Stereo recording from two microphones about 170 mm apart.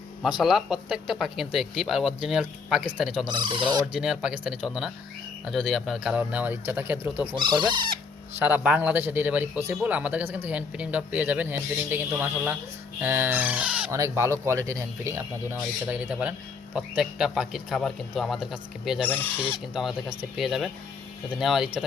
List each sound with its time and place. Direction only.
0.2 s speech: centre (ahead or behind)
3.2 s speech: 25° right (ahead or behind)
3.9 s a man's voice: 5° right (ahead or behind)
7.3 s speech: 25° right (ahead or behind)
8.4 s a man's voice: 10° right (ahead or behind)
13.9 s a man's voice: 15° right (ahead or behind)
19.0 s speech: 10° left (ahead or behind)
19.7 s speech: 5° right (ahead or behind)